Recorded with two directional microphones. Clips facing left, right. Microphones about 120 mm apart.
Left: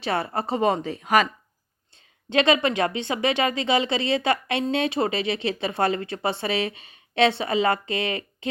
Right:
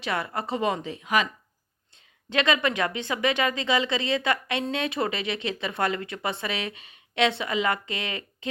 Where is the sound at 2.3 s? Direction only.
30° left (ahead or behind).